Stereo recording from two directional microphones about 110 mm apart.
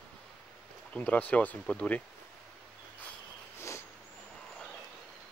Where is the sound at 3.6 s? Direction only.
25° left (ahead or behind).